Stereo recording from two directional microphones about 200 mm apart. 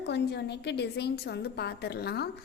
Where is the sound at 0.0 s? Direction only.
60° left (ahead or behind).